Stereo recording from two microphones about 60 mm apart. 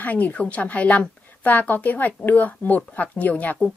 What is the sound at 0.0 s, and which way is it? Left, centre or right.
A woman's voice, left.